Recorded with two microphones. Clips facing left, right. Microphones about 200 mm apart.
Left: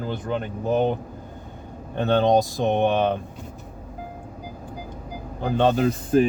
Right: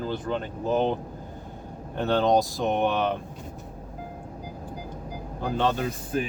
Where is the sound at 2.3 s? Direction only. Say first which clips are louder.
Left 3 dB; 25° left (ahead or behind).